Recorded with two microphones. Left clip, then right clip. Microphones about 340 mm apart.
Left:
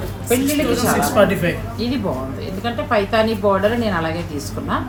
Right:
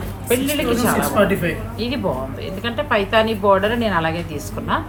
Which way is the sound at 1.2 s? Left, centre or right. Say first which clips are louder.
Left 3 dB; centre.